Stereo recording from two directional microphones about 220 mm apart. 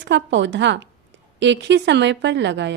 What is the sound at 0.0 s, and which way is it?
Speech, 55° right (ahead or behind).